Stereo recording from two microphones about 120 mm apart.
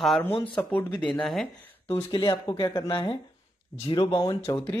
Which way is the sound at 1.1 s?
Centre (ahead or behind).